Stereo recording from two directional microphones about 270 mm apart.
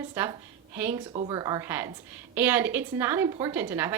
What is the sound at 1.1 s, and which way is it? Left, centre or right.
A woman's voice, centre.